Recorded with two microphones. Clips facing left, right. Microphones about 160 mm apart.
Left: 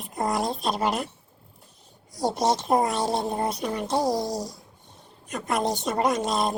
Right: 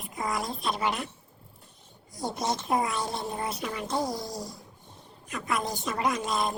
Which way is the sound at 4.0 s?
85° left.